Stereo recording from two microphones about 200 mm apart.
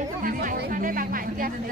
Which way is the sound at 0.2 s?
45° right (ahead or behind).